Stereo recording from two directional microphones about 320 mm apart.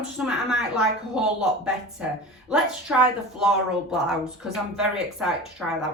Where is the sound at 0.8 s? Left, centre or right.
Centre.